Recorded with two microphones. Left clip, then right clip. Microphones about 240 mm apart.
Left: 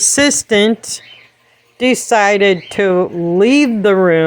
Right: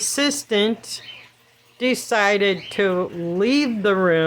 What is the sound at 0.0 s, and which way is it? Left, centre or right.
Speech, left.